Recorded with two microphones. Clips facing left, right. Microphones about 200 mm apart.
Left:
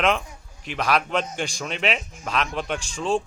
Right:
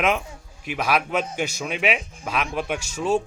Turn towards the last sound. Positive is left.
turn(degrees=-10)  # may be behind; listen again after turning